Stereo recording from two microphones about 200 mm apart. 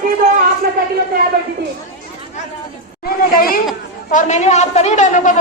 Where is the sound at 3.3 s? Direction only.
45° left (ahead or behind).